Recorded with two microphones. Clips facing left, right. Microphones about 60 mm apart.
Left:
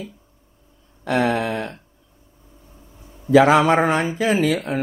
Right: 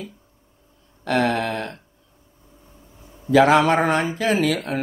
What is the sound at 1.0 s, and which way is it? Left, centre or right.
Speech, centre.